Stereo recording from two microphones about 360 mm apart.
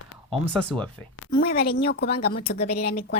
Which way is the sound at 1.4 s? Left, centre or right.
Left.